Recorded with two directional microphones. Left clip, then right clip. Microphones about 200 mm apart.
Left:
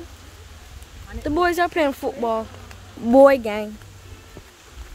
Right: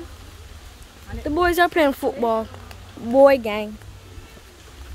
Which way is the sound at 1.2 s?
5° left (ahead or behind).